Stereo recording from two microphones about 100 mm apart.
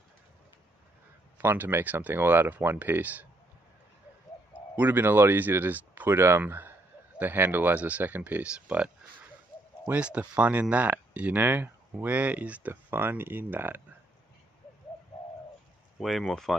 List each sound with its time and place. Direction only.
1.4 s speech: 20° right (ahead or behind)
4.7 s speech: 20° right (ahead or behind)
16.0 s speech: centre (ahead or behind)